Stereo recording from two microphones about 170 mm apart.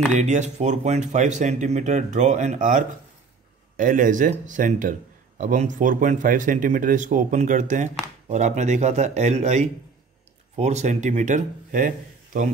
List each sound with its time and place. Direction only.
0.1 s a man's voice: 45° right (ahead or behind)